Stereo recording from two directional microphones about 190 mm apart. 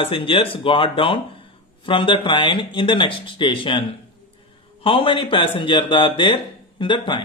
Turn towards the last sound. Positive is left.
turn(degrees=25)  # may be behind; listen again after turning